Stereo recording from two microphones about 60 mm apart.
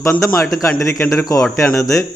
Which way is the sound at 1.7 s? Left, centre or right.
Left.